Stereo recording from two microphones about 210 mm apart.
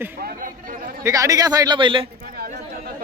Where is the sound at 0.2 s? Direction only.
45° right (ahead or behind).